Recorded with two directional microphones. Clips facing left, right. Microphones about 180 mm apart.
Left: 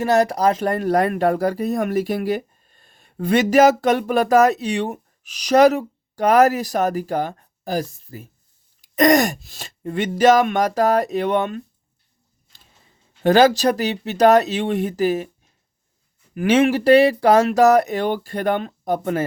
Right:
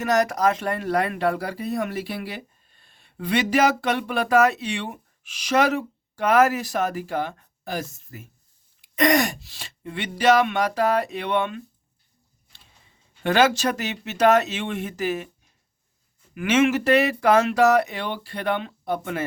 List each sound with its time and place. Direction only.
0.0 s speech: 30° left (ahead or behind)
13.2 s speech: 35° left (ahead or behind)
16.3 s speech: 35° left (ahead or behind)